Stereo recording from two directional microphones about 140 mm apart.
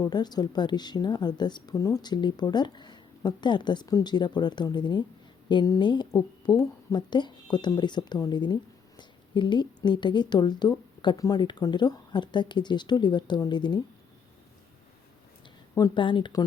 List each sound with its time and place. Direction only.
0.0 s a woman's voice: 30° left (ahead or behind)
16.0 s a woman's voice: 35° left (ahead or behind)